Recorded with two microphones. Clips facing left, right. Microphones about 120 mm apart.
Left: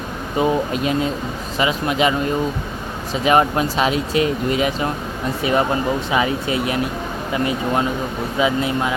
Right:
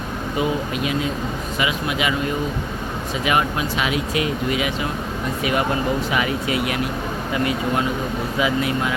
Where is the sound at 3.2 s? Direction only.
35° left (ahead or behind).